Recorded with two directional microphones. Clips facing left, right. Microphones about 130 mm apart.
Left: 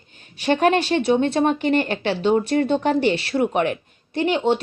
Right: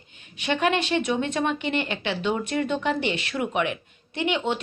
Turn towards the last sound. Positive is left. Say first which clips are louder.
# left 6 dB
turn(degrees=35)  # may be behind; listen again after turning